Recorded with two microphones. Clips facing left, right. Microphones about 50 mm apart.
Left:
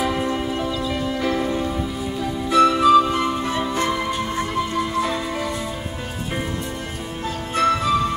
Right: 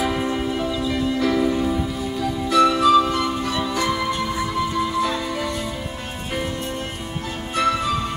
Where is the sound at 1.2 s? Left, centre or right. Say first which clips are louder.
Right 3 dB; centre.